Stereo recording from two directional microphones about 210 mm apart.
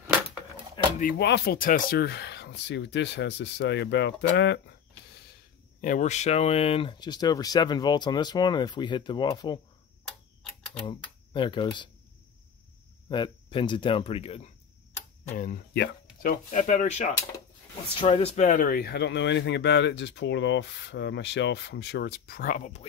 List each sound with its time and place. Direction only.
0.9 s speech: 45° left (ahead or behind)
5.8 s speech: 35° left (ahead or behind); by 9.6 s 20° left (ahead or behind)
10.6 s typewriter: 5° left (ahead or behind)
10.9 s speech: 25° left (ahead or behind)
13.1 s speech: 20° left (ahead or behind)
15.3 s speech: 40° left (ahead or behind)